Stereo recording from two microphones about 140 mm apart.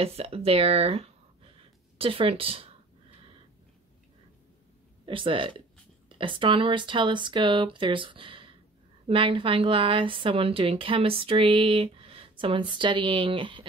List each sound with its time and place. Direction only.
0.0 s speech: 45° right (ahead or behind)
5.0 s a woman's voice: 35° right (ahead or behind)